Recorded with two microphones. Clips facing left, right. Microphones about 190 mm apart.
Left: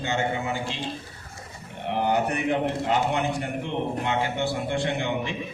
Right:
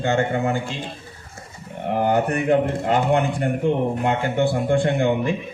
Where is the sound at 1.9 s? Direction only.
50° right (ahead or behind).